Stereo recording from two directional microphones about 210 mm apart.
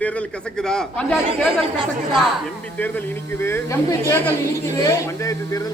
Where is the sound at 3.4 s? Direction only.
10° left (ahead or behind).